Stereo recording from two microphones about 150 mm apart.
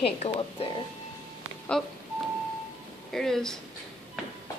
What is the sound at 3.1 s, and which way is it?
Speech, 5° left (ahead or behind).